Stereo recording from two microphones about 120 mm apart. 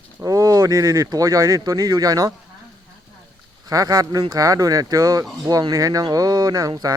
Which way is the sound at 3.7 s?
30° right (ahead or behind).